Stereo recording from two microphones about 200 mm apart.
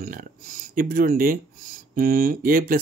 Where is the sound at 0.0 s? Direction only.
45° right (ahead or behind).